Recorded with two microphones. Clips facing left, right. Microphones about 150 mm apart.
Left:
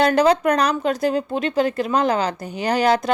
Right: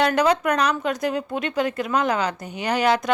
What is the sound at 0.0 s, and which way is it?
Speech, 30° left (ahead or behind).